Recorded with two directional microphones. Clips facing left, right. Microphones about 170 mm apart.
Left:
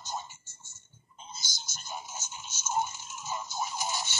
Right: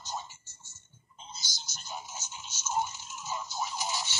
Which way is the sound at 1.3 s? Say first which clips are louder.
Left 1 dB; 50° left (ahead or behind).